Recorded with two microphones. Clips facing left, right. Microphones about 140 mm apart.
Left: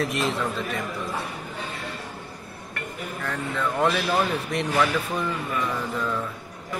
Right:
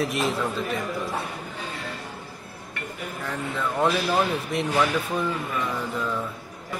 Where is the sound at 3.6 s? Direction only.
Centre (ahead or behind).